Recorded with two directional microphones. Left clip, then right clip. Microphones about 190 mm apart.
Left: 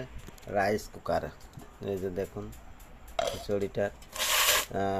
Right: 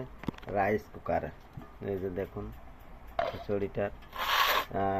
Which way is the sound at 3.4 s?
15° left (ahead or behind).